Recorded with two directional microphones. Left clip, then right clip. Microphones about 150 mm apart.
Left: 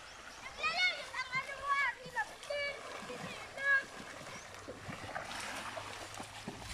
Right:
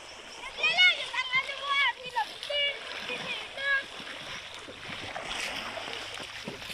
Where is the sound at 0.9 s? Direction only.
5° right (ahead or behind).